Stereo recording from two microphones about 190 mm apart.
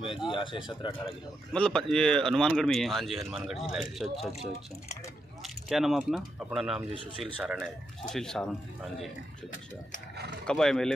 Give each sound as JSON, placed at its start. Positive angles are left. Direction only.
{"t": 0.0, "sound": "speech", "side_deg": 25}
{"t": 1.5, "sound": "speech", "side_deg": 5}
{"t": 5.4, "sound": "speech", "side_deg": 0}
{"t": 10.4, "sound": "speech", "side_deg": 5}